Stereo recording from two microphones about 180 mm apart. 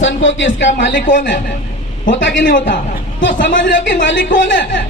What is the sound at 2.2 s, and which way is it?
Speech, 90° left.